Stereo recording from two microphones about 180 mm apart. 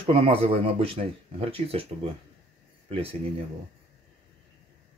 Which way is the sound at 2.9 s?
30° right (ahead or behind).